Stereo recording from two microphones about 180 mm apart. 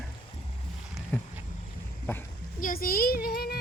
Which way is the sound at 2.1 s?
10° left (ahead or behind).